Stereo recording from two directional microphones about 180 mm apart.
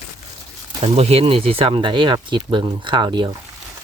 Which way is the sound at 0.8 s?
35° right (ahead or behind).